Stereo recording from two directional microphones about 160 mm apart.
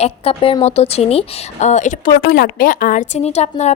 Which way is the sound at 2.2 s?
70° left (ahead or behind).